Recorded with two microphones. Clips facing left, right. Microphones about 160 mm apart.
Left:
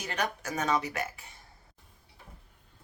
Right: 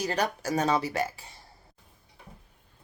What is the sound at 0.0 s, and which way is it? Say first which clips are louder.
Speech: right 5 dB; 35° right (ahead or behind).